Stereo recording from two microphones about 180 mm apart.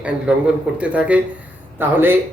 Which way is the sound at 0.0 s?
5° right (ahead or behind).